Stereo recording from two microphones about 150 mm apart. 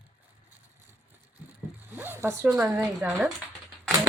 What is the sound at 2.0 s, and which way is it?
Speech, 15° right (ahead or behind).